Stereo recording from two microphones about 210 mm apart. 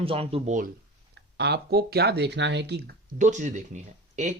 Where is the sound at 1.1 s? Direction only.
50° right (ahead or behind).